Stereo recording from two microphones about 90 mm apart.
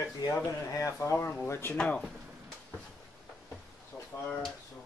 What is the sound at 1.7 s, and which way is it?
Speech, 10° left (ahead or behind).